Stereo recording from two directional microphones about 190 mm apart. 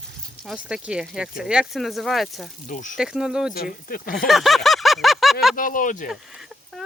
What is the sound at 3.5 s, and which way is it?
Speech, 50° left (ahead or behind).